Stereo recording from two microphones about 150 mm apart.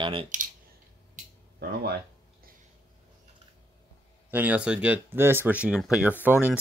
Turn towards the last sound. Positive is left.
turn(degrees=-10)  # may be behind; listen again after turning